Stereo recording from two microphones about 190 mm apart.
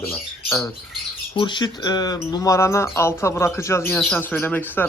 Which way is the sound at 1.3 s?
25° left (ahead or behind).